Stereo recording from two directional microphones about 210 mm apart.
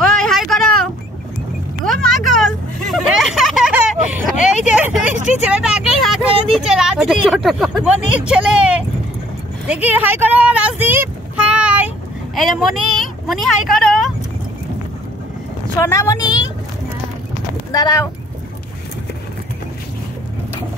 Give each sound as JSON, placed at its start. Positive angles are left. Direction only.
{"t": 0.0, "sound": "a sound", "side_deg": 0}
{"t": 1.9, "sound": "vehicle", "side_deg": 0}
{"t": 6.5, "sound": "speech", "side_deg": -5}
{"t": 15.8, "sound": "a woman's voice", "side_deg": 15}
{"t": 17.6, "sound": "speech", "side_deg": 15}